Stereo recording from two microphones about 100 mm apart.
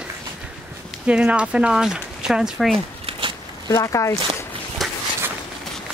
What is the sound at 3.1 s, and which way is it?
Walk, 60° right (ahead or behind).